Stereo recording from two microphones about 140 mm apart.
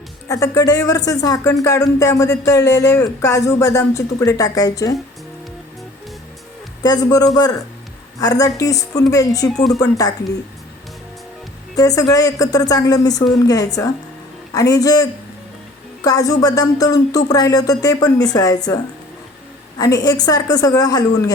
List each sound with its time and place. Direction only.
0.3 s speech: 25° left (ahead or behind)
6.8 s speech: 25° left (ahead or behind)
9.5 s speech: centre (ahead or behind)
11.8 s speech: 25° left (ahead or behind)
19.8 s speech: 25° left (ahead or behind)